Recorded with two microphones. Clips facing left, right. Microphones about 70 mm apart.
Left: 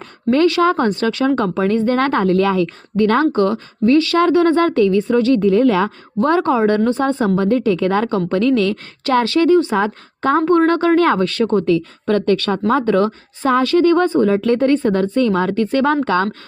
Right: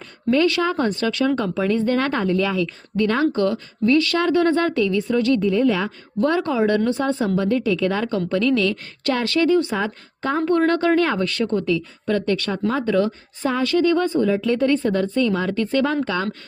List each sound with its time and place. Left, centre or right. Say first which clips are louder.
0.3 s speech: left 5 dB; left
2.2 s a woman's voice: left 6 dB; left
3.3 s speech: left 4 dB; left
5.5 s a woman's voice: left 5 dB; left
6.1 s speech: left 5 dB; left
9.7 s a woman's voice: left 6 dB; left
14.3 s speech: left 5 dB; left
14.8 s speech: left 4 dB; left